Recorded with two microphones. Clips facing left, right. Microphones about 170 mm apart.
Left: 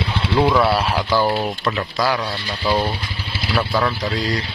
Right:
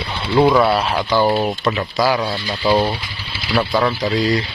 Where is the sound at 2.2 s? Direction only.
20° right (ahead or behind).